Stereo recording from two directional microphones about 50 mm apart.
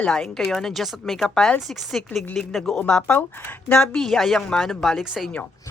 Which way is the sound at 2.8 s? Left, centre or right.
Left.